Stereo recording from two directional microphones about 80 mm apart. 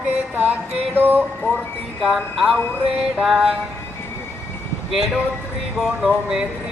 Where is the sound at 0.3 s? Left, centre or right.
Centre.